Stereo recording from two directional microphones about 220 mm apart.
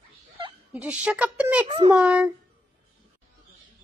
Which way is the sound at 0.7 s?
5° right (ahead or behind).